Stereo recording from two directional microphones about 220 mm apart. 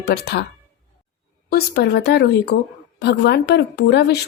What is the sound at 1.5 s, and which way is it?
A woman's voice, 45° left (ahead or behind).